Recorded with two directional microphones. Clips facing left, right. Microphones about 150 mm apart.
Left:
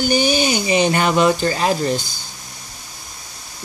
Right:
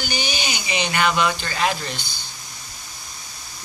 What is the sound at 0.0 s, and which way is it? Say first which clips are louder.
Speech: left 11 dB; 45° left (ahead or behind).